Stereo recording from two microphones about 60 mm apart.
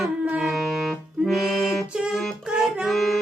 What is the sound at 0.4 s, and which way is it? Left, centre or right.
Music, centre.